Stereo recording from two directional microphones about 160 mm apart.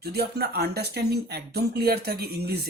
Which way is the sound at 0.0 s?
80° right.